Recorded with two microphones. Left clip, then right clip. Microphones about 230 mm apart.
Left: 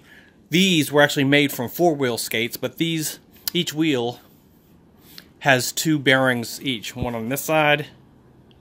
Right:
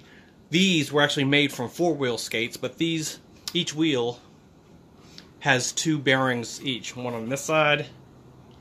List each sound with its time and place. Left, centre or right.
0.5 s speech: left